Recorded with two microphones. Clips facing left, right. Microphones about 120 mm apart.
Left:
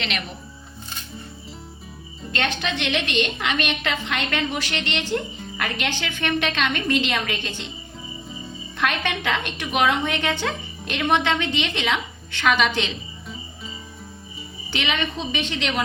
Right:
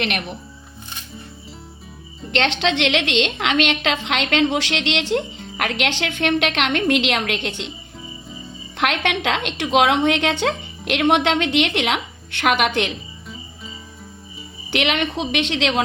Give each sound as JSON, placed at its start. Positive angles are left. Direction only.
{"t": 0.0, "sound": "speech", "side_deg": -55}
{"t": 2.3, "sound": "a woman's voice", "side_deg": -80}
{"t": 8.8, "sound": "a woman's voice", "side_deg": -70}
{"t": 14.7, "sound": "a woman's voice", "side_deg": -65}
{"t": 15.3, "sound": "a woman's voice", "side_deg": -80}